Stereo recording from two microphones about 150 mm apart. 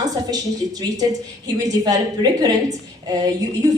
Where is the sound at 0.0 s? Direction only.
25° right (ahead or behind).